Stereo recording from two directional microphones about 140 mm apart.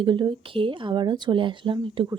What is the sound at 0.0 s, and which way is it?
A woman's voice, 35° right (ahead or behind).